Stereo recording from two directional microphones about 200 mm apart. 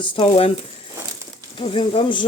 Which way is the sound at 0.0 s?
25° left (ahead or behind).